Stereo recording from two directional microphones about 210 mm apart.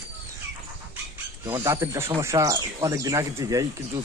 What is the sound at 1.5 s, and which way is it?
Speech, 15° right (ahead or behind).